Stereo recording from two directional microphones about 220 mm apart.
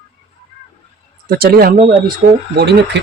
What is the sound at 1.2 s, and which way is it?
Speech, 45° right (ahead or behind).